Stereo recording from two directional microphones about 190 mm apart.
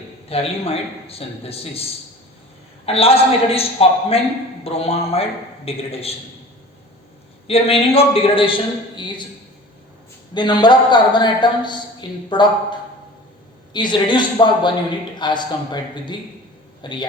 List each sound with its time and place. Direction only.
0.3 s a man's voice: 30° left (ahead or behind)
7.4 s a man's voice: 30° left (ahead or behind)
10.3 s a man's voice: 25° left (ahead or behind)
13.7 s a man's voice: 25° left (ahead or behind)